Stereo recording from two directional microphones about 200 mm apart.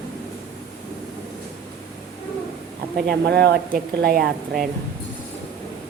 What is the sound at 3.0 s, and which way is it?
Speech, 55° right (ahead or behind).